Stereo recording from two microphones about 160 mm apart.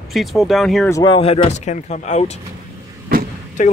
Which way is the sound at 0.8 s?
25° left (ahead or behind).